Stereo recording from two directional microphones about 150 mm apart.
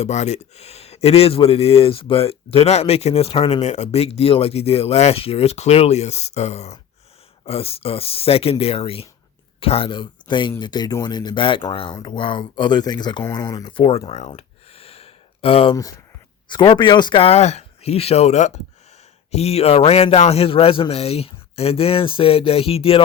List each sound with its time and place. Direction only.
0.0 s a man's voice: 50° left (ahead or behind); by 13.2 s 30° left (ahead or behind)
13.3 s a sound: 30° left (ahead or behind)
15.7 s a man's voice: 25° left (ahead or behind); by 23.0 s 40° left (ahead or behind)